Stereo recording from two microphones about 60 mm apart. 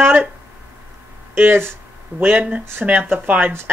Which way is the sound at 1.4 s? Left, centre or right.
Right.